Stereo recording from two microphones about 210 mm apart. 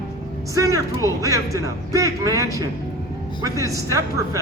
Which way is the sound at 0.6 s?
15° right (ahead or behind).